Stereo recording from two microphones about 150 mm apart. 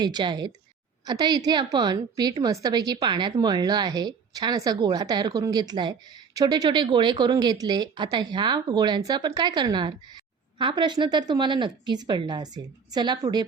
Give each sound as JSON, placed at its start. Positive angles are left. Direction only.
{"t": 0.0, "sound": "a woman's voice", "side_deg": -30}